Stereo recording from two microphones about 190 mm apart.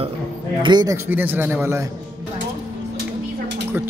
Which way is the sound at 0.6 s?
20° right (ahead or behind).